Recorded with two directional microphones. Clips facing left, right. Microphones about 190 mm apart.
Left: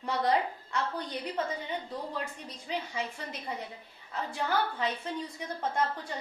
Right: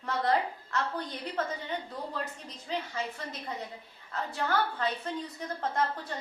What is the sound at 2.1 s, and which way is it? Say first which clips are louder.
Speech: even; 10° left (ahead or behind).